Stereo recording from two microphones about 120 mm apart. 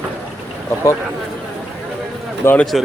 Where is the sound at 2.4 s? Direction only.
15° left (ahead or behind).